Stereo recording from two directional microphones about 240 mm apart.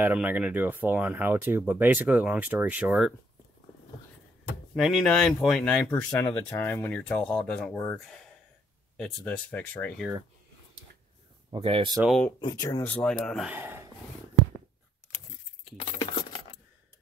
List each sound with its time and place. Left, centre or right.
0.0 s speech: centre
4.7 s speech: centre
11.5 s speech: right
12.0 s speech: centre
12.4 s speech: centre
16.0 s keys jangling: centre